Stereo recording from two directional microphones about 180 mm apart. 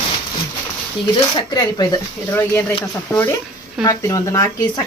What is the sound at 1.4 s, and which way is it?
Speech, 25° left (ahead or behind).